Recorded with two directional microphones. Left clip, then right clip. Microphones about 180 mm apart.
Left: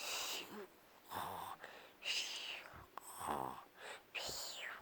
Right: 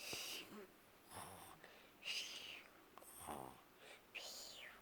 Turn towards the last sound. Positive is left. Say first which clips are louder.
# left 8 dB
turn(degrees=30)  # may be behind; listen again after turning